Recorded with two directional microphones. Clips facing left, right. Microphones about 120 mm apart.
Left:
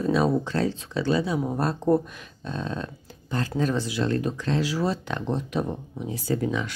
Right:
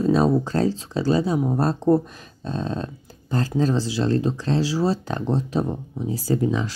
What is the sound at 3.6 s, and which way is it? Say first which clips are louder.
Speech: right 3 dB; 30° right (ahead or behind).